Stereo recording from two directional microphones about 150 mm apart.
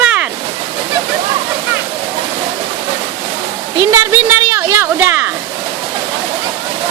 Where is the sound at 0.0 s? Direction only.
10° right (ahead or behind).